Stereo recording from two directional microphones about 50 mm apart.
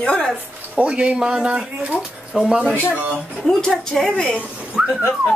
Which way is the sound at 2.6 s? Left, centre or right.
Left.